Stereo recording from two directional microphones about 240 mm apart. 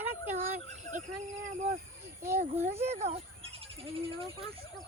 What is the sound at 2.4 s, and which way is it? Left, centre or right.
Speech, right.